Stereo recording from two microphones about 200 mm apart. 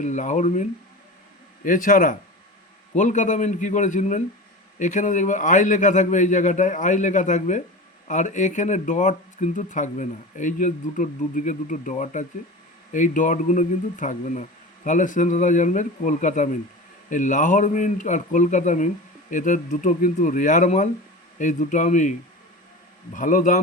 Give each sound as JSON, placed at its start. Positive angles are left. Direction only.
{"t": 0.0, "sound": "speech", "side_deg": 35}
{"t": 23.1, "sound": "speech", "side_deg": 40}